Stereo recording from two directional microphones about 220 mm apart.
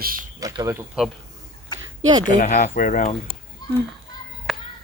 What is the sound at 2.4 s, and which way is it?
Speech, 35° left (ahead or behind).